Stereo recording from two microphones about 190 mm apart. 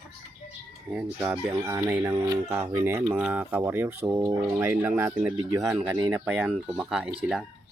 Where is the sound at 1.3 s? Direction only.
15° right (ahead or behind).